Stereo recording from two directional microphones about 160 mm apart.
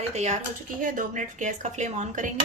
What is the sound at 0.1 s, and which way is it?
Speech, 45° right (ahead or behind).